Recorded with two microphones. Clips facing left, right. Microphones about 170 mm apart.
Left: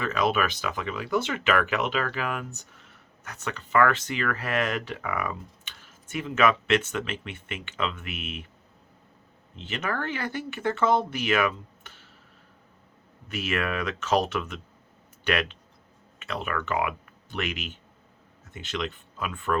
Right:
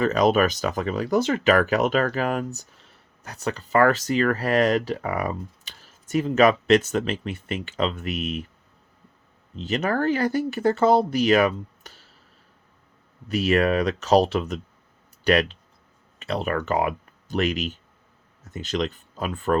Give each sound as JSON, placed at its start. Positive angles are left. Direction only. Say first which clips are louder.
{"t": 0.0, "sound": "speech", "louder": "right 7 dB", "side_deg": -40}
{"t": 9.6, "sound": "speech", "louder": "right 7 dB", "side_deg": -40}
{"t": 13.2, "sound": "speech", "louder": "right 9 dB", "side_deg": -35}